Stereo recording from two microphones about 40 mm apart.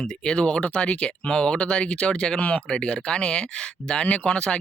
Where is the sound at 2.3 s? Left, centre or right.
Left.